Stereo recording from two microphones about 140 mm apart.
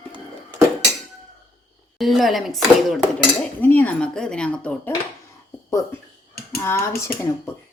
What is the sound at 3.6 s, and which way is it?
A woman's voice, 15° left (ahead or behind).